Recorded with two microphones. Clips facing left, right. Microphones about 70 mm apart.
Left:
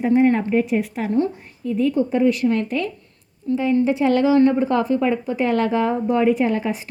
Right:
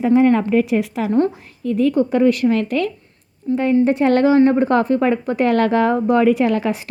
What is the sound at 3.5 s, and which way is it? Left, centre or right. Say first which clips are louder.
Speech: right 2 dB; right.